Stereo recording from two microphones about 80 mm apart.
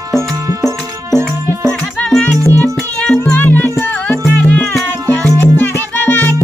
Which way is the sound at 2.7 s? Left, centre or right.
Centre.